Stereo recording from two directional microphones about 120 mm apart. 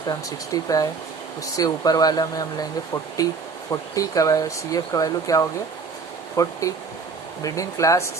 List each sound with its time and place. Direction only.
0.1 s speech: 30° left (ahead or behind)